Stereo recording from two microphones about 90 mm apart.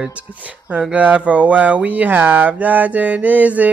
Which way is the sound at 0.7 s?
15° right (ahead or behind).